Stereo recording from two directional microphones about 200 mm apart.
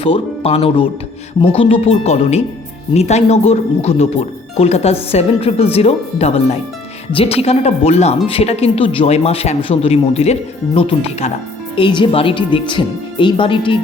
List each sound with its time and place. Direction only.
0.0 s a woman's voice: 30° left (ahead or behind)